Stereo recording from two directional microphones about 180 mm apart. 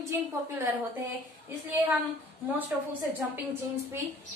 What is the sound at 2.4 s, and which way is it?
Speech, 10° right (ahead or behind).